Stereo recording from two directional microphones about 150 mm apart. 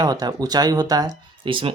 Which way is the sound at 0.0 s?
25° right (ahead or behind).